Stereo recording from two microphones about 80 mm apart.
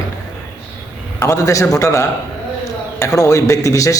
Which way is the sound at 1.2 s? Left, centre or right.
Left.